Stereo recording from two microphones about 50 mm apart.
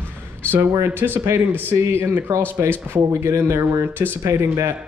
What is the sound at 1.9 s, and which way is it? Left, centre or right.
Speech, right.